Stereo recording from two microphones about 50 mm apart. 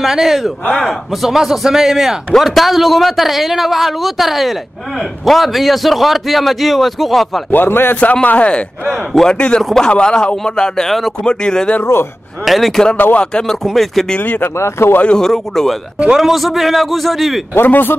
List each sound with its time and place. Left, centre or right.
0.0 s a man's voice: centre
7.5 s speech: left
8.0 s a man's voice: left
8.9 s speech: centre
9.3 s a man's voice: left; by 11.1 s centre
11.2 s speech: centre
11.8 s speech: left
12.4 s a man's voice: centre
12.9 s speech: left
13.2 s speech: centre
14.2 s speech: left
14.6 s speech: left
15.0 s a man's voice: centre
17.6 s speech: left